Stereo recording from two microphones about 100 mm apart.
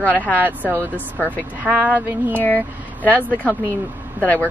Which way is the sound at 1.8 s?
15° right (ahead or behind).